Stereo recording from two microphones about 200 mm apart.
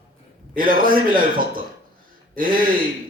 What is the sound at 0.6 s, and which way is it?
A man's voice, 45° right (ahead or behind).